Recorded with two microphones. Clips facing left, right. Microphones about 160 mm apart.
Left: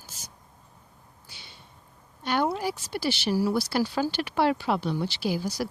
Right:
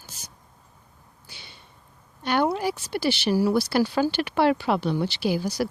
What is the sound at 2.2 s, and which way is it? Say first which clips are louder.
Speech: right 3 dB; 65° right (ahead or behind).